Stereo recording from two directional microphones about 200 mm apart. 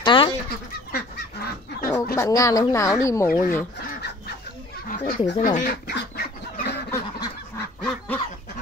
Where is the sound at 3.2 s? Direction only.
45° left (ahead or behind).